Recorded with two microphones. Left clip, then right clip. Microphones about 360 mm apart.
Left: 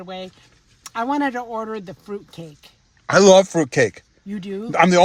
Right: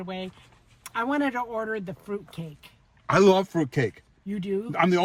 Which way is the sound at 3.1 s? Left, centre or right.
Centre.